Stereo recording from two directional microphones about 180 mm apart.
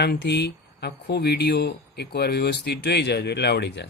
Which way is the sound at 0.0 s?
65° left (ahead or behind).